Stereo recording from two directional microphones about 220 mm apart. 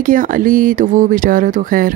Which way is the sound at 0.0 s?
40° right (ahead or behind).